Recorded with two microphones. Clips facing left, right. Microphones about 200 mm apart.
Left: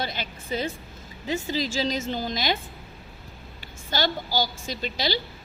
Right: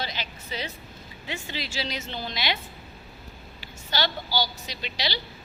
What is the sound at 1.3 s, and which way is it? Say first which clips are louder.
A woman's voice: left 8 dB; 40° left (ahead or behind).